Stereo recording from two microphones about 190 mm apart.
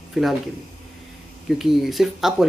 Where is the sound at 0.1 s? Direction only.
Centre (ahead or behind).